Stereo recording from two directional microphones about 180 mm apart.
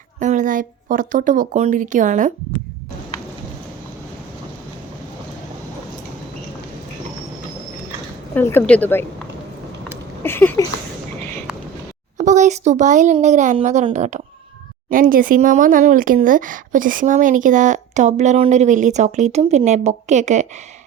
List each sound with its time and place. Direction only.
0.2 s speech: 45° right (ahead or behind)
8.4 s a woman's voice: 10° left (ahead or behind)
10.2 s a woman's voice: 10° left (ahead or behind)
12.1 s a woman's voice: 40° right (ahead or behind)